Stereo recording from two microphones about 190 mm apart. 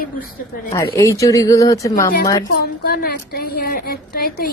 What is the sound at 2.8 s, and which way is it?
A woman's voice, 55° left (ahead or behind).